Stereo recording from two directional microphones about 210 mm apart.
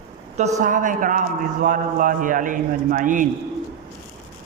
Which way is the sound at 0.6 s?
40° right (ahead or behind).